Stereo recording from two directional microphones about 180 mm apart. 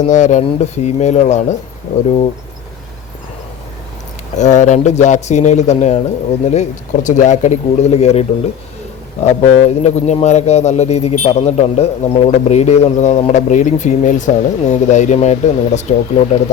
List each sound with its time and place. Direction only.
0.0 s speech: 45° left (ahead or behind)
4.4 s speech: 40° left (ahead or behind)
9.2 s speech: 40° left (ahead or behind)